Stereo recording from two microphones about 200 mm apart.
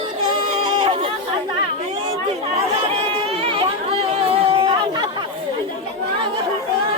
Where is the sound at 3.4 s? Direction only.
25° right (ahead or behind).